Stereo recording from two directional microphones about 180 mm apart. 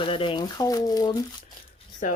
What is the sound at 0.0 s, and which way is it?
Speech, 30° left (ahead or behind).